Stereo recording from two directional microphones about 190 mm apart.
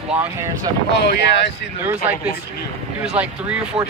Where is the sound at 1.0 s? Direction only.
60° left (ahead or behind).